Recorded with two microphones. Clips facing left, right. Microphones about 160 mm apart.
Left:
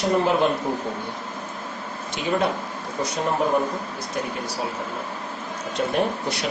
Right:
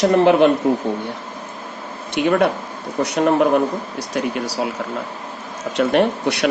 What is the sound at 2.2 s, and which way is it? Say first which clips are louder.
Speech: right 7 dB; 65° right (ahead or behind).